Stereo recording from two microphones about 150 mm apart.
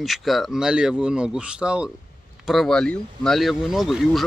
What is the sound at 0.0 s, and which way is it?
Speech, centre (ahead or behind).